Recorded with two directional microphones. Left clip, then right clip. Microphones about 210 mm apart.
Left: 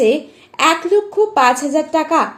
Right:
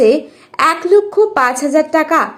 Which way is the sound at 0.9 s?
20° right (ahead or behind).